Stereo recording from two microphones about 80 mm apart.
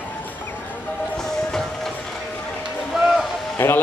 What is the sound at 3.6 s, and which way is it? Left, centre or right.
Speech, left.